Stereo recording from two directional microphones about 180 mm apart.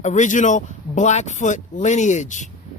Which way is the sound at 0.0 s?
45° left (ahead or behind).